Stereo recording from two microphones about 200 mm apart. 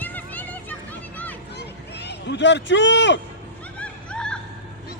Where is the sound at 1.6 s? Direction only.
55° left (ahead or behind).